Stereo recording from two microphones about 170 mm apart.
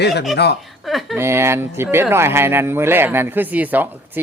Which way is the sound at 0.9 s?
Centre (ahead or behind).